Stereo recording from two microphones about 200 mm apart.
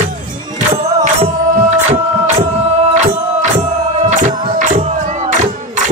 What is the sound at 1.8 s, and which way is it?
Music, 35° right (ahead or behind).